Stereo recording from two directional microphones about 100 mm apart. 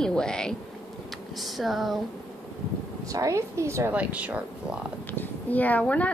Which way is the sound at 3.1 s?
35° right (ahead or behind).